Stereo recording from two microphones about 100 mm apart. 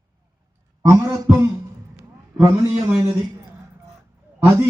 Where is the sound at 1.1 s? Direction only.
30° right (ahead or behind).